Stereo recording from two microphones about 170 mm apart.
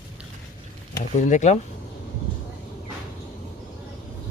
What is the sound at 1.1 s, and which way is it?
Speech, 45° left (ahead or behind).